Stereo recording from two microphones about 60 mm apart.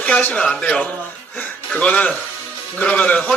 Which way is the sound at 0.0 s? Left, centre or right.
Left.